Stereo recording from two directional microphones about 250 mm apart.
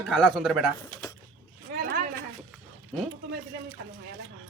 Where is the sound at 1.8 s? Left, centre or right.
Right.